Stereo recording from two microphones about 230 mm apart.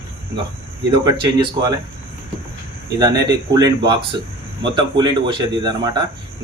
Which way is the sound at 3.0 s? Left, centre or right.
Centre.